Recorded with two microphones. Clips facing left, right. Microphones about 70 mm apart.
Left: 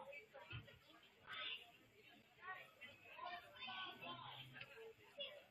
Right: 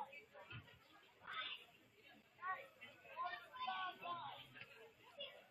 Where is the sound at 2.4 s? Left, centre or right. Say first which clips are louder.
Right 8 dB; right.